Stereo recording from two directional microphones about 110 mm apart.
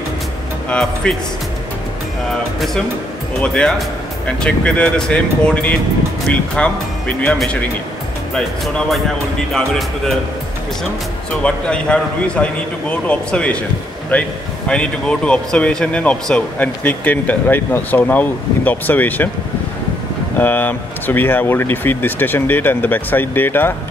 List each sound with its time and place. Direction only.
0.7 s speech: 10° left (ahead or behind)
3.3 s speech: 5° left (ahead or behind)
8.4 s speech: 5° left (ahead or behind)
11.4 s speech: 10° left (ahead or behind)
20.3 s speech: 15° left (ahead or behind)